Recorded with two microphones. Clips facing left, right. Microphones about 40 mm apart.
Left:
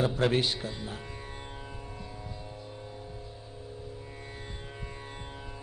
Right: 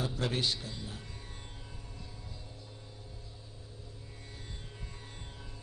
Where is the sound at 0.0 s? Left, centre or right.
Left.